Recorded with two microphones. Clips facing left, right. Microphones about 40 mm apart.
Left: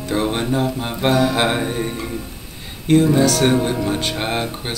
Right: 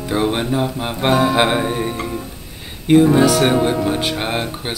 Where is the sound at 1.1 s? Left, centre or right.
Right.